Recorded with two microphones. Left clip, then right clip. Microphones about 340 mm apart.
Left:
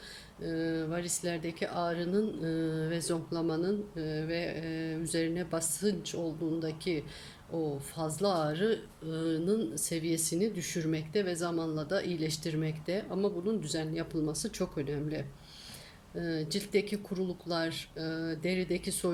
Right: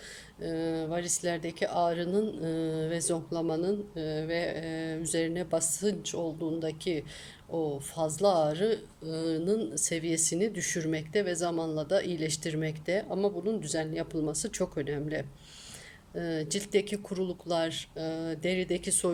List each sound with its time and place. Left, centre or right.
0.4 s mantra: centre
6.6 s speech: centre
13.1 s mantra: centre
14.4 s speech: centre